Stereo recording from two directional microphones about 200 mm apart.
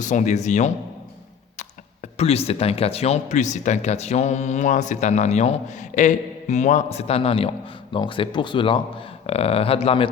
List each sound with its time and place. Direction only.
0.0 s speech: 35° left (ahead or behind)